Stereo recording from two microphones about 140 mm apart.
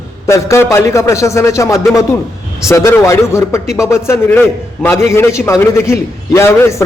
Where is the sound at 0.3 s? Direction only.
20° left (ahead or behind).